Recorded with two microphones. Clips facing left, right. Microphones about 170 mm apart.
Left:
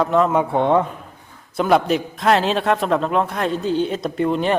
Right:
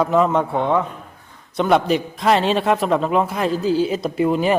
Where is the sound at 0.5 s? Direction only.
20° left (ahead or behind).